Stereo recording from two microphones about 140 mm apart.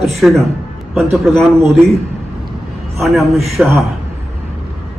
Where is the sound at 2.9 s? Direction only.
Centre (ahead or behind).